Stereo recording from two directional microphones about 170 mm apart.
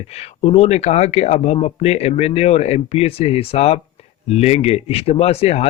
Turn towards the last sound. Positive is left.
turn(degrees=35)  # may be behind; listen again after turning